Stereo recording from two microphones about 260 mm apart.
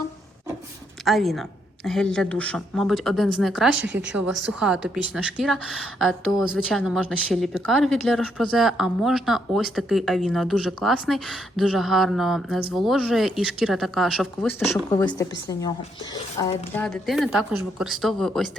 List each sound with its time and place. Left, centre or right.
1.0 s speech: centre
3.8 s speech: right
4.6 s speech: centre
16.7 s speech: centre